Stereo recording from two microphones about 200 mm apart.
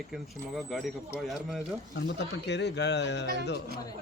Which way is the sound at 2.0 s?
60° left (ahead or behind).